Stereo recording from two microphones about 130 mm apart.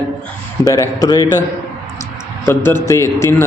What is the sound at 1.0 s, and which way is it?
Speech, 30° left (ahead or behind).